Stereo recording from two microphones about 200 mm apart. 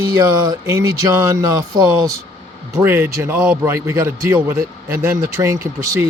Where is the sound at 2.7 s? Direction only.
10° right (ahead or behind).